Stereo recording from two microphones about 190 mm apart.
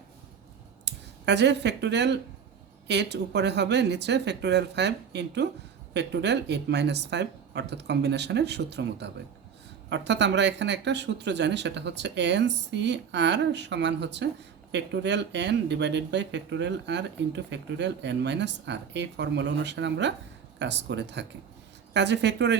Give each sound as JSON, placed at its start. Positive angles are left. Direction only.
{"t": 0.9, "sound": "speech", "side_deg": -65}